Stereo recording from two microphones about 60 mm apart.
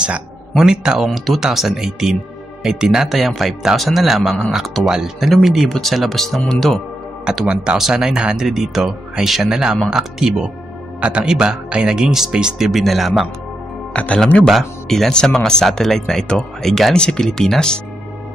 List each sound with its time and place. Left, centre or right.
0.6 s speech: centre
7.2 s speech: centre
13.9 s speech: centre
14.5 s speech: centre